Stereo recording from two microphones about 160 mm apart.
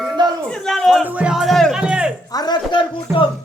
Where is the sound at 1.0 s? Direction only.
10° right (ahead or behind).